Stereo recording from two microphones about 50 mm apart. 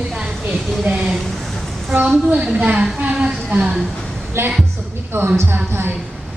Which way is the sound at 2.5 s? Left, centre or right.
Right.